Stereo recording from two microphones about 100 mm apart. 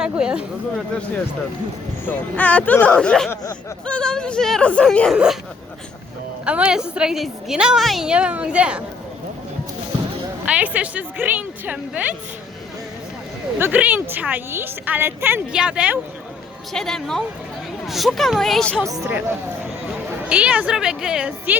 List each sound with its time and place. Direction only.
0.0 s speech: 10° right (ahead or behind)
2.0 s speech: 15° left (ahead or behind)
5.1 s a woman's voice: 10° right (ahead or behind)
6.4 s a woman's voice: 10° right (ahead or behind)
10.4 s a woman's voice: 15° right (ahead or behind)
13.6 s a woman's voice: 15° right (ahead or behind)
15.5 s a woman's voice: 10° right (ahead or behind)
16.7 s speech: 5° left (ahead or behind)
20.2 s a woman's voice: 10° right (ahead or behind)